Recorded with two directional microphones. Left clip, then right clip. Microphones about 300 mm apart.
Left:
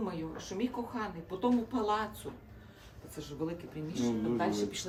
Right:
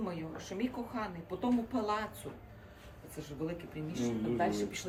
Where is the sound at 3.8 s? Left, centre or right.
Left.